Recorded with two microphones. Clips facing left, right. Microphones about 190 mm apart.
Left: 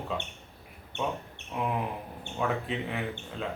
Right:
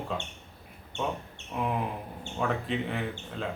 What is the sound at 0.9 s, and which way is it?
Speech, 60° left (ahead or behind).